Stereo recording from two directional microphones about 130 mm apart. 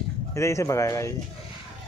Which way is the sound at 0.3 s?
20° left (ahead or behind).